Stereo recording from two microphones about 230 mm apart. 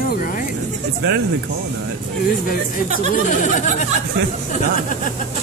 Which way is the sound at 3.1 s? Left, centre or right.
Left.